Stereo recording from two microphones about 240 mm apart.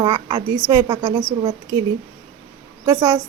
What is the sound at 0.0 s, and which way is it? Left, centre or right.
A woman's voice, centre.